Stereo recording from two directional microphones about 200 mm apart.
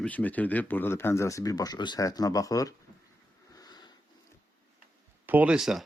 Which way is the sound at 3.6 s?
20° left (ahead or behind).